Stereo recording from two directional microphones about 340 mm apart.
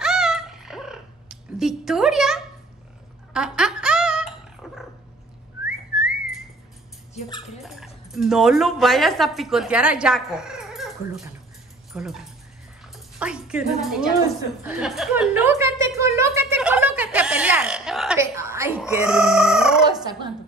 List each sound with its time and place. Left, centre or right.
0.0 s purr: centre
3.3 s a sound: centre
4.6 s dog: centre
5.7 s whistling: centre
7.2 s dog: centre
7.6 s a woman's voice: centre
12.8 s music: centre